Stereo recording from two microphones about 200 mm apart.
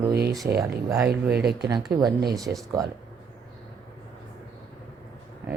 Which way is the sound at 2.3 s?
15° right (ahead or behind).